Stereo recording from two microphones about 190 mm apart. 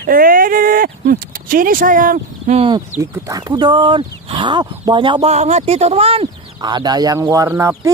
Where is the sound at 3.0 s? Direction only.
20° right (ahead or behind).